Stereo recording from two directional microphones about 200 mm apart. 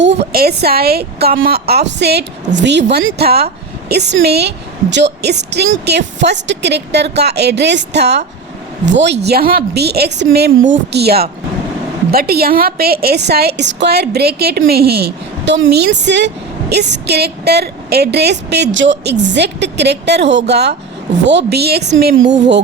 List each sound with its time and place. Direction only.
0.0 s a woman's voice: 60° right (ahead or behind)
3.2 s speech: 55° right (ahead or behind)
9.2 s a woman's voice: 50° right (ahead or behind)